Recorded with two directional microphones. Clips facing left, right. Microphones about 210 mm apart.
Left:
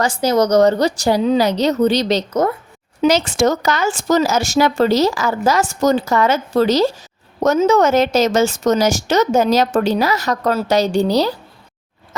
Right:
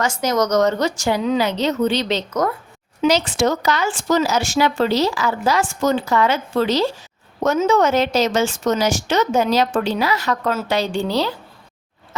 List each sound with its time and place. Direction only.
0.0 s a woman's voice: 30° left (ahead or behind)